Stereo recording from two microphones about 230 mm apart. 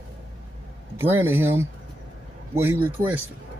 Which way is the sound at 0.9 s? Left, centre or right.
Centre.